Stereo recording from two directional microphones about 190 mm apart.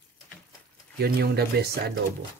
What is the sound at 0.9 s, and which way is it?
Speech, 55° right (ahead or behind).